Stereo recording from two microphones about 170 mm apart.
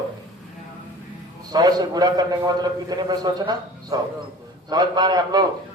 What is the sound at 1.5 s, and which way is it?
A man's voice, 25° right (ahead or behind).